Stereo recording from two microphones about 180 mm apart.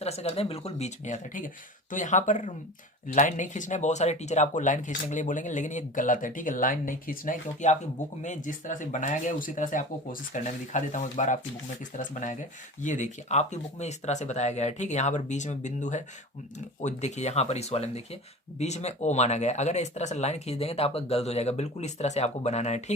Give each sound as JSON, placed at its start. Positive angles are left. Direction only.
{"t": 0.0, "sound": "speech", "side_deg": 35}